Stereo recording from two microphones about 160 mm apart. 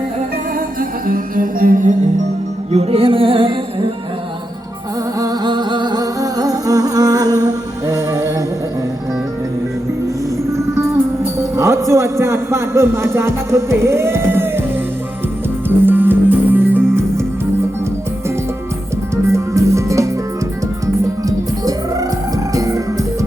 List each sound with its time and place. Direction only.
0.8 s music: 60° right (ahead or behind)
2.7 s music: 35° right (ahead or behind)
5.2 s music: 25° right (ahead or behind)
11.5 s music: 20° right (ahead or behind)
15.9 s music: 10° right (ahead or behind)
19.1 s music: 20° right (ahead or behind)